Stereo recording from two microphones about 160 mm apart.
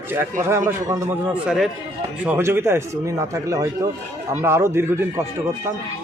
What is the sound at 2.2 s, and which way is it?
Speech, 15° right (ahead or behind).